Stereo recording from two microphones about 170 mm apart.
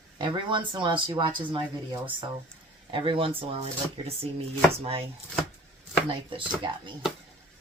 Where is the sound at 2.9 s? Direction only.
30° right (ahead or behind).